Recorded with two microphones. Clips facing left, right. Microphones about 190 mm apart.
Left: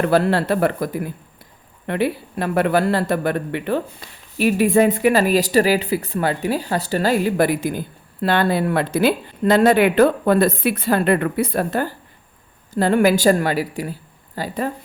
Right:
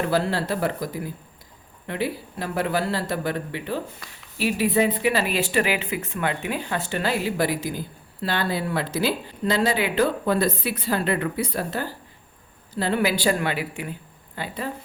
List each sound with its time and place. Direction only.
0.0 s speech: 60° left (ahead or behind)
4.4 s speech: 50° left (ahead or behind)